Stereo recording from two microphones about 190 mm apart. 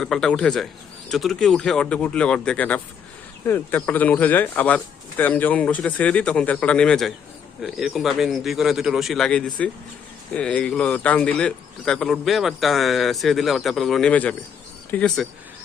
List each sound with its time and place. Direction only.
0.0 s a man's voice: 5° left (ahead or behind)